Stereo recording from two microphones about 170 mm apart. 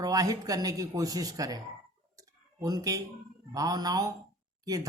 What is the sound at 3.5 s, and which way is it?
Speech, 20° right (ahead or behind).